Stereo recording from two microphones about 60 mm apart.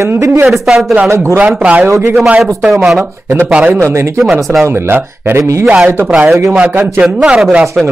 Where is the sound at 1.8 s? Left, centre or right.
Right.